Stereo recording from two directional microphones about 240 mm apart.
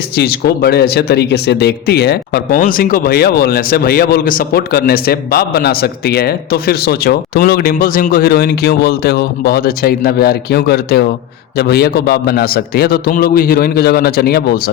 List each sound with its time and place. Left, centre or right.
0.2 s speech: left